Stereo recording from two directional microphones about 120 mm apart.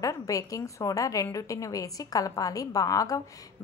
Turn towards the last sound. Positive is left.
turn(degrees=30)  # may be behind; listen again after turning